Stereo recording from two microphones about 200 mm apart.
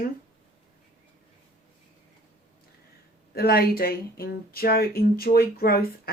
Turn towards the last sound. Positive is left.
turn(degrees=50)  # may be behind; listen again after turning